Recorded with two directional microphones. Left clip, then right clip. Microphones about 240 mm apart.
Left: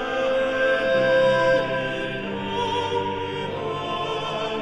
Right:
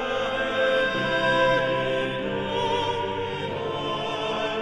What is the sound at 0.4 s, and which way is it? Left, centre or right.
Music, left.